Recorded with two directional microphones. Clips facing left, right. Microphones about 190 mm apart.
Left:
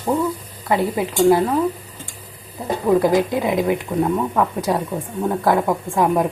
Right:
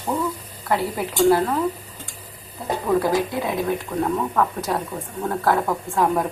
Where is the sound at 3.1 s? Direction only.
15° left (ahead or behind).